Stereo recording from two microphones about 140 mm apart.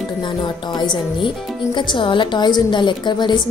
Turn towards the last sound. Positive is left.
turn(degrees=35)  # may be behind; listen again after turning